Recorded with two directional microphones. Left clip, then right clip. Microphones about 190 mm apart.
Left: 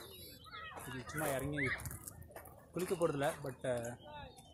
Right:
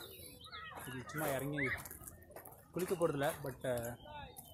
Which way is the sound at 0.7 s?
Centre (ahead or behind).